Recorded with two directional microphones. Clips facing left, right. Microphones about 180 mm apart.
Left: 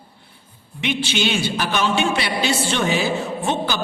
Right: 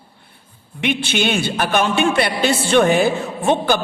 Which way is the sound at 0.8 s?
55° right (ahead or behind).